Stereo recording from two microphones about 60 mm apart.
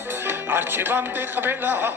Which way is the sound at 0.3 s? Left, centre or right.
Right.